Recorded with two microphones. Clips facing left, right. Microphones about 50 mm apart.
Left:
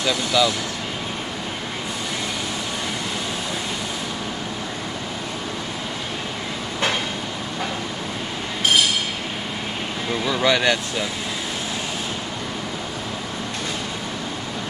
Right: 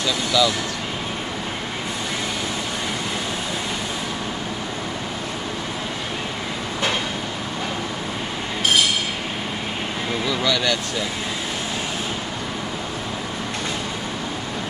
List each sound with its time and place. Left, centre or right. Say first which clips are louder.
0.0 s speech: even; centre
10.2 s vehicle: left 4 dB; centre